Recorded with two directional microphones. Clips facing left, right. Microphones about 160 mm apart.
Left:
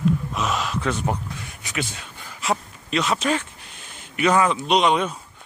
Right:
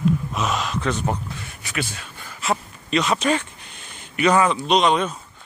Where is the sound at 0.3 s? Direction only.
Centre (ahead or behind).